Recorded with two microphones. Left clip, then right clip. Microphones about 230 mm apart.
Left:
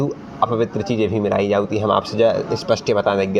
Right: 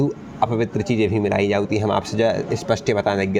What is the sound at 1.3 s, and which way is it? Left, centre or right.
A man's voice, right.